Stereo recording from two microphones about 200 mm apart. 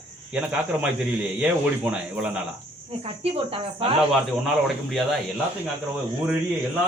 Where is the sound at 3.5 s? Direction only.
25° right (ahead or behind).